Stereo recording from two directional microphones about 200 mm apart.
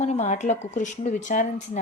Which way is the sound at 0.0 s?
35° left (ahead or behind).